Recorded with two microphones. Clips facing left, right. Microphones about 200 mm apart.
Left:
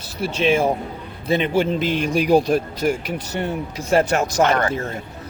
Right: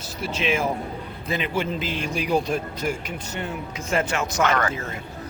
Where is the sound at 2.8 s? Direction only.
50° left (ahead or behind).